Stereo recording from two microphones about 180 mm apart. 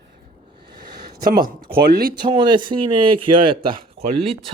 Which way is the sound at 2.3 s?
25° right (ahead or behind).